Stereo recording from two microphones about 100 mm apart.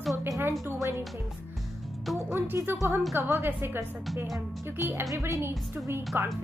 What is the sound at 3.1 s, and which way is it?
Speech, 25° right (ahead or behind).